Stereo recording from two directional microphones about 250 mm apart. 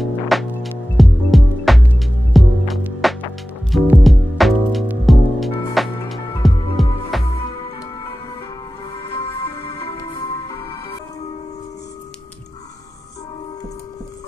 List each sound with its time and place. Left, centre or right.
0.0 s music: centre
8.9 s music: left